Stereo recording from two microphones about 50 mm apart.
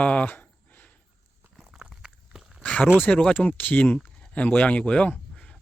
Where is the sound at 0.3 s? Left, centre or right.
Left.